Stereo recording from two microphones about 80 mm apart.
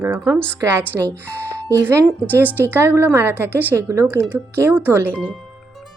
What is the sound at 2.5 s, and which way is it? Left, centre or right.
A woman's voice, right.